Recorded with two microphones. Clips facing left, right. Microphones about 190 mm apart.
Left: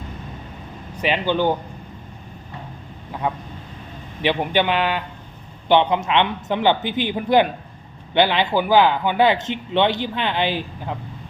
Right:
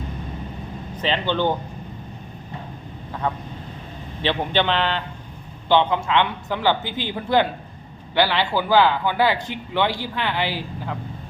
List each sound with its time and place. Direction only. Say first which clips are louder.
0.9 s a man's voice: left 2 dB; 10° left (ahead or behind)
3.1 s vehicle: left 1 dB; 10° left (ahead or behind)
4.2 s a man's voice: left 2 dB; 15° left (ahead or behind)